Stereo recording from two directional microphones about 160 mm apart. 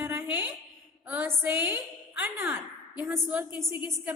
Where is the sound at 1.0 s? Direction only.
10° right (ahead or behind).